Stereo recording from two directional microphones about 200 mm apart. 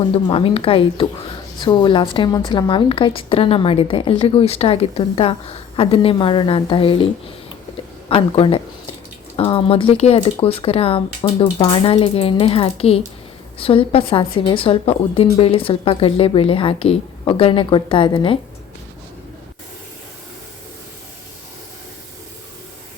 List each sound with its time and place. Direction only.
0.1 s a woman's voice: 25° left (ahead or behind)
8.1 s a woman's voice: 25° left (ahead or behind)